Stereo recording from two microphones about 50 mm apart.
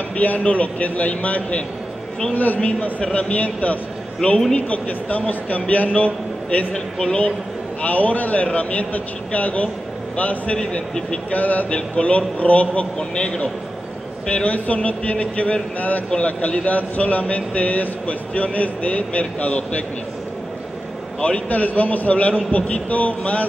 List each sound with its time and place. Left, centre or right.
0.1 s a man's voice: left
6.7 s a man's voice: centre
11.3 s a man's voice: left
21.2 s a man's voice: left